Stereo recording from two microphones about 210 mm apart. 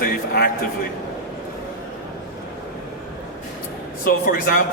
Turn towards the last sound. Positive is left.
turn(degrees=45)  # may be behind; listen again after turning